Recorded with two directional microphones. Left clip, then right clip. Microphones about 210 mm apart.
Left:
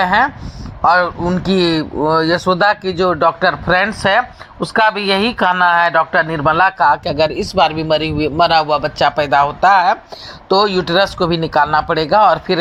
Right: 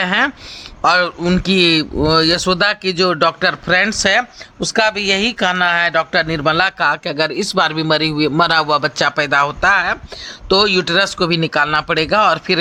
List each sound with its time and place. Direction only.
0.0 s a man's voice: 10° right (ahead or behind)
1.2 s speech: 25° right (ahead or behind)
1.5 s a man's voice: 15° right (ahead or behind)